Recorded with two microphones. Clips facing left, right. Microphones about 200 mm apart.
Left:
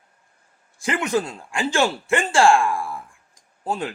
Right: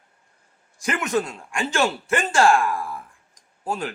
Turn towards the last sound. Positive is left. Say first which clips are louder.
# left 1 dB
turn(degrees=25)  # may be behind; listen again after turning